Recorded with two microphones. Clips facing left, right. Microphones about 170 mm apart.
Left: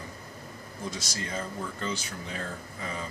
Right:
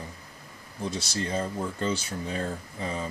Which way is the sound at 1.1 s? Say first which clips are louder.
Right 5 dB; 30° right (ahead or behind).